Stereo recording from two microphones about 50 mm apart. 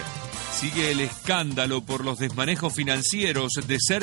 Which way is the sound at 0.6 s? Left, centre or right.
Right.